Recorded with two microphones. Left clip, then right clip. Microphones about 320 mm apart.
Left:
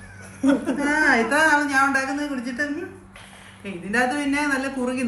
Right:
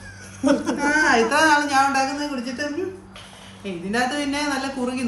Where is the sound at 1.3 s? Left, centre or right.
Centre.